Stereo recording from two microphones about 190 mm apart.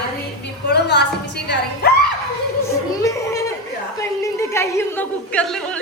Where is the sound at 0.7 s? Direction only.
60° left (ahead or behind).